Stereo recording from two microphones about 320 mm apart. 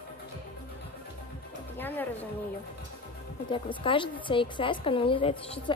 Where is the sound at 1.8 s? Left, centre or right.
Centre.